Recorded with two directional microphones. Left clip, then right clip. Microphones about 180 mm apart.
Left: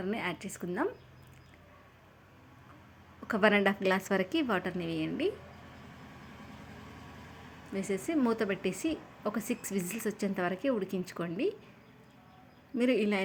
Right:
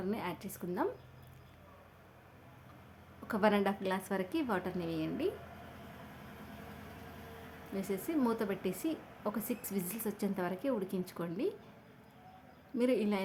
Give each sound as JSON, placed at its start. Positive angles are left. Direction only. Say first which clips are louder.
{"t": 0.0, "sound": "a woman's voice", "louder": "left 4 dB", "side_deg": 10}
{"t": 3.2, "sound": "a woman's voice", "louder": "left 5 dB", "side_deg": 10}
{"t": 7.7, "sound": "a woman's voice", "louder": "left 4 dB", "side_deg": 10}
{"t": 12.7, "sound": "a woman's voice", "louder": "left 3 dB", "side_deg": 10}